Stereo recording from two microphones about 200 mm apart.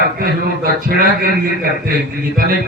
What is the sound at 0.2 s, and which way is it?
A man's voice, 45° right (ahead or behind).